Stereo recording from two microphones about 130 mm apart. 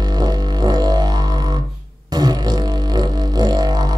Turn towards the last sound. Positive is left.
turn(degrees=-30)  # may be behind; listen again after turning